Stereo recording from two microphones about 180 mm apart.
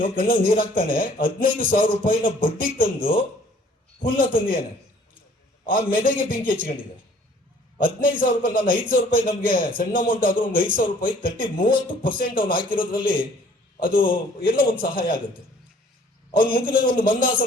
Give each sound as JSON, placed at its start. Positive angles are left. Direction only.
{"t": 0.2, "sound": "a man's voice", "side_deg": 55}
{"t": 4.0, "sound": "a man's voice", "side_deg": 55}
{"t": 5.6, "sound": "a man's voice", "side_deg": 50}
{"t": 7.8, "sound": "a man's voice", "side_deg": 50}
{"t": 16.6, "sound": "a man's voice", "side_deg": 50}